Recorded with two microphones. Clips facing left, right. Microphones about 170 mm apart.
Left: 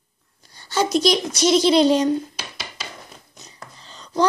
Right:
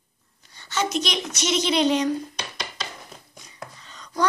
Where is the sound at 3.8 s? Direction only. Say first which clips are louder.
Left 5 dB; 30° left (ahead or behind).